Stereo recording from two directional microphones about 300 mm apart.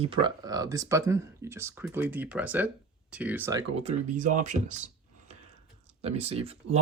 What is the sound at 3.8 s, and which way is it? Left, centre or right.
Speech, right.